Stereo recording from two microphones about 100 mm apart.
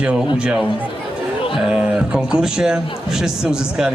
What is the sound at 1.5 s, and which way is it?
A man's voice, 5° right (ahead or behind).